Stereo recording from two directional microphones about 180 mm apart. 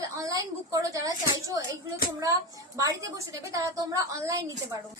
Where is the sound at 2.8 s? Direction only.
20° right (ahead or behind).